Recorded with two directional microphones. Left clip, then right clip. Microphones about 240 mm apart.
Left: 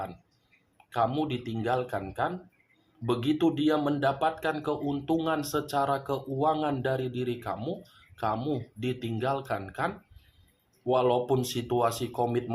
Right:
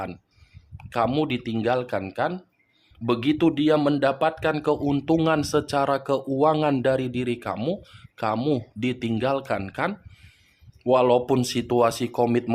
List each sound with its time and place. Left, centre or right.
0.9 s speech: right